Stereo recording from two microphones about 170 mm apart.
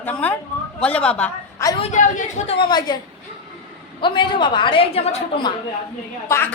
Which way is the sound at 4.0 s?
30° left (ahead or behind).